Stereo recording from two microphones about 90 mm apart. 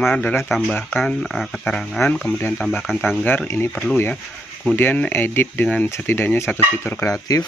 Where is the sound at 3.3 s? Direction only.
25° left (ahead or behind).